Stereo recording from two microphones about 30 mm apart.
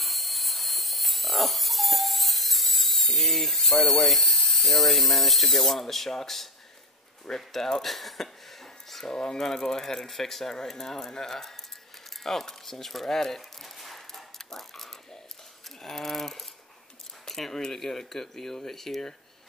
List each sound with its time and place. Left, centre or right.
0.0 s electric toothbrush: centre
7.2 s speech: centre
9.1 s speech: left
13.7 s a sound: centre
15.8 s speech: centre
17.3 s a sound: centre
17.6 s speech: centre